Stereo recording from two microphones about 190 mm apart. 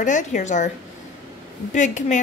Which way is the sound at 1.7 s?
40° left (ahead or behind).